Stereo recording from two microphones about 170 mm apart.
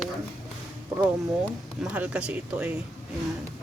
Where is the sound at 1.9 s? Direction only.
5° right (ahead or behind).